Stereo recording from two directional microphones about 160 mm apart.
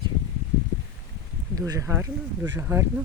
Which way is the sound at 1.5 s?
20° right (ahead or behind).